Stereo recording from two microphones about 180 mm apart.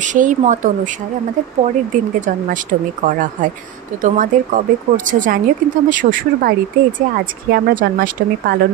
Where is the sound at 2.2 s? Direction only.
45° right (ahead or behind).